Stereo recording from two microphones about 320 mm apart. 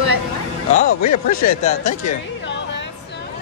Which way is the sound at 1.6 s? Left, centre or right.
Left.